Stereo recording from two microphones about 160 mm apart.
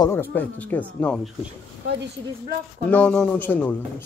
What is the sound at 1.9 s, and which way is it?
Speech, 90° right.